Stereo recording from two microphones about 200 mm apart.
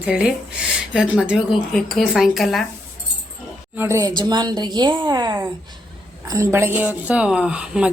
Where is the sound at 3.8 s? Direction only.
15° right (ahead or behind).